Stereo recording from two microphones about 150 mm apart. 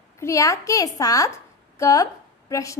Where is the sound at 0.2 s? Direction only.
20° left (ahead or behind).